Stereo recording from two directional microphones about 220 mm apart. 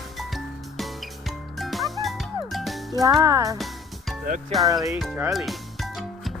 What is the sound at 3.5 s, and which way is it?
Music, centre (ahead or behind).